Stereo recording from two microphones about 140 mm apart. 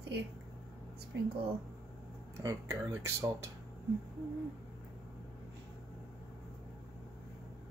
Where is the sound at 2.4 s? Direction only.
20° right (ahead or behind).